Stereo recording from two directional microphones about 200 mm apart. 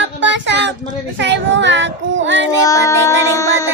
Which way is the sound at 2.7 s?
15° left (ahead or behind).